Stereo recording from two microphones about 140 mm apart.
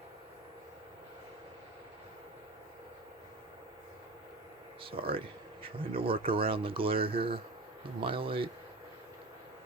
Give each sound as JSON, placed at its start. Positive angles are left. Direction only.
{"t": 4.8, "sound": "speech", "side_deg": -40}